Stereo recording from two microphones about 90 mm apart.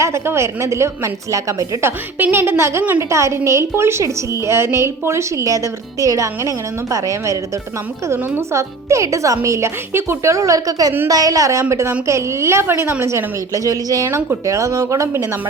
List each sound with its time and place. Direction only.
0.0 s a woman's voice: 30° right (ahead or behind)
2.1 s a woman's voice: 25° right (ahead or behind)
8.4 s a woman's voice: 35° right (ahead or behind)